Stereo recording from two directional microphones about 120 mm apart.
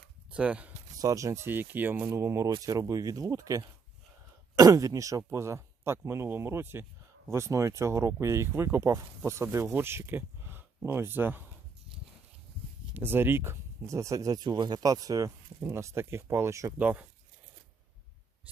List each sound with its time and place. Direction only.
0.3 s speech: 10° right (ahead or behind)
0.9 s speech: 30° right (ahead or behind)
12.9 s speech: 20° right (ahead or behind)
16.7 s speech: 15° right (ahead or behind)